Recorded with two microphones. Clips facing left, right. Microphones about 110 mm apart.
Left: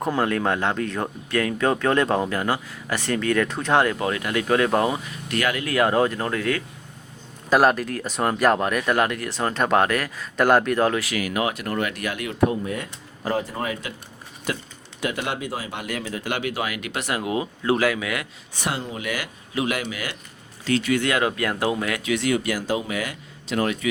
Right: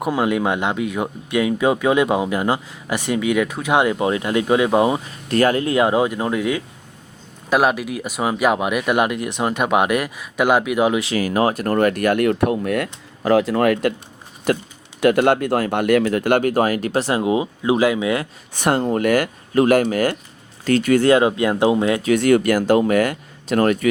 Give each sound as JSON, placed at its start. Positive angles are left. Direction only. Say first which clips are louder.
{"t": 0.0, "sound": "speech", "louder": "right 3 dB", "side_deg": -15}
{"t": 5.0, "sound": "speech", "louder": "right 8 dB", "side_deg": -35}
{"t": 7.5, "sound": "speech", "louder": "right 1 dB", "side_deg": -5}
{"t": 11.0, "sound": "speech", "louder": "right 6 dB", "side_deg": -30}
{"t": 14.5, "sound": "speech", "louder": "right 9 dB", "side_deg": -55}
{"t": 18.6, "sound": "speech", "louder": "right 11 dB", "side_deg": -50}
{"t": 21.1, "sound": "speech", "louder": "right 8 dB", "side_deg": -25}
{"t": 22.0, "sound": "speech", "louder": "right 7 dB", "side_deg": -50}